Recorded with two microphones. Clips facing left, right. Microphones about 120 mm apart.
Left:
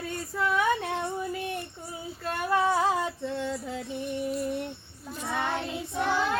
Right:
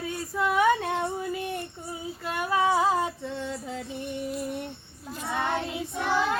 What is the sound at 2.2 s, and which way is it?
Female singing, 5° right (ahead or behind).